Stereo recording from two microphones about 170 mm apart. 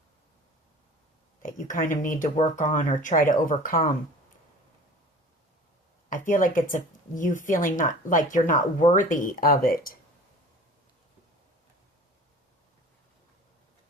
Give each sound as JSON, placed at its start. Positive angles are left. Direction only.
{"t": 1.4, "sound": "speech", "side_deg": 50}
{"t": 6.1, "sound": "speech", "side_deg": 50}